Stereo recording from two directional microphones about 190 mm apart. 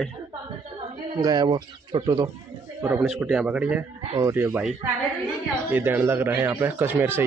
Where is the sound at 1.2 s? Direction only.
20° right (ahead or behind).